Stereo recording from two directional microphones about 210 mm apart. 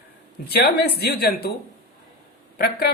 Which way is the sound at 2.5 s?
45° left (ahead or behind).